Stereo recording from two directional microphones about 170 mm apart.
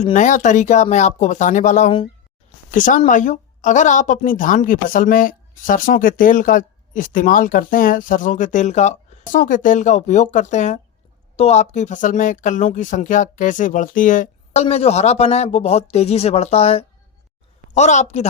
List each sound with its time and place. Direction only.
0.0 s a woman's voice: 45° left (ahead or behind)